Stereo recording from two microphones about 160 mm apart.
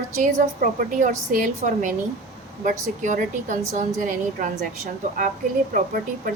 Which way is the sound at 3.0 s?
50° right (ahead or behind).